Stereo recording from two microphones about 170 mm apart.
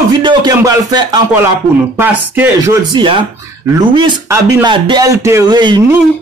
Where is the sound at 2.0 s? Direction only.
10° right (ahead or behind).